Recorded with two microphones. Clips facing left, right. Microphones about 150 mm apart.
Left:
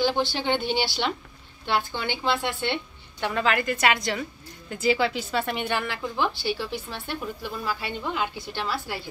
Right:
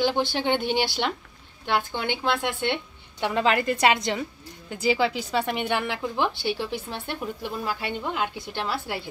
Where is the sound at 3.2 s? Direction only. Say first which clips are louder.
Right 2 dB; 25° right (ahead or behind).